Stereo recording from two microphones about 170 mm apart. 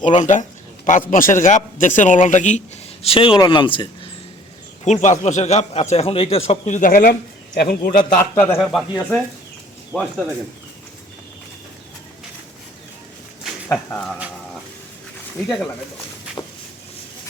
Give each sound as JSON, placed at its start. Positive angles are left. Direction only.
{"t": 0.0, "sound": "a man's voice", "side_deg": 45}
{"t": 3.0, "sound": "speech", "side_deg": 35}
{"t": 4.9, "sound": "a man's voice", "side_deg": 45}
{"t": 8.1, "sound": "a man's voice", "side_deg": 15}
{"t": 8.5, "sound": "speech", "side_deg": 0}
{"t": 13.9, "sound": "speech", "side_deg": 5}